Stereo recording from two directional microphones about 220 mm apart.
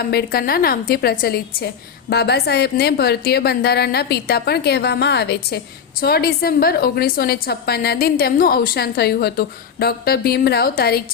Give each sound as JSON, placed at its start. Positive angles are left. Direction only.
{"t": 0.1, "sound": "a woman's voice", "side_deg": 45}